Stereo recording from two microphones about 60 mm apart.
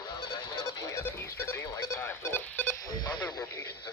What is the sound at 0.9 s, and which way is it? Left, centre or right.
Music, left.